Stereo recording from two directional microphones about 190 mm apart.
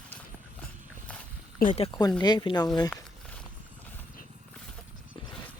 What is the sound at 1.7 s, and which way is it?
Speech, 25° left (ahead or behind).